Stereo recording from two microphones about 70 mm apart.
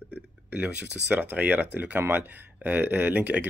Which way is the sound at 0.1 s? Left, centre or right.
Centre.